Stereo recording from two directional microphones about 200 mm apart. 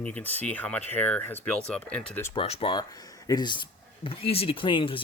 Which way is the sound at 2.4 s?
30° left (ahead or behind).